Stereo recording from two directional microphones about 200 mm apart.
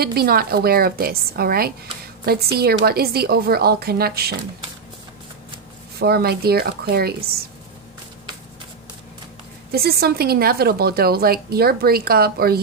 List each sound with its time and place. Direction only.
0.0 s a woman's voice: 50° right (ahead or behind)
5.9 s a woman's voice: 50° right (ahead or behind)
9.7 s a woman's voice: 50° right (ahead or behind)